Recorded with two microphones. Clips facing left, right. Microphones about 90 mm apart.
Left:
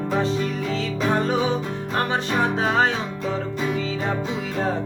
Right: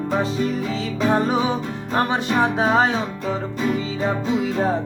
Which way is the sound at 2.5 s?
15° right (ahead or behind).